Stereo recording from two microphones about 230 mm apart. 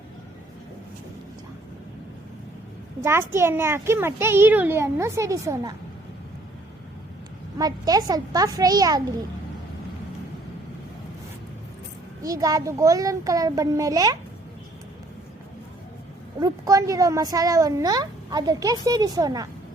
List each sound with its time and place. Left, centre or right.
3.0 s speech: centre
7.6 s speech: centre
12.2 s speech: centre
16.4 s speech: centre